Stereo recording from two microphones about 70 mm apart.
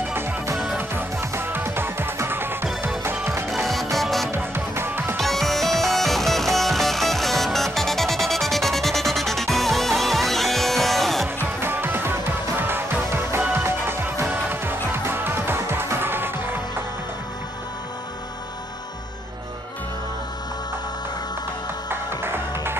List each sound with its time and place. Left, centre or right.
0.7 s music: right
3.4 s music: centre
4.3 s music: right
5.1 s music: centre
11.4 s music: right
21.8 s music: right